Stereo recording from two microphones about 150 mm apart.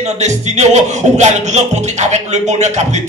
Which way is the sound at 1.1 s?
50° right (ahead or behind).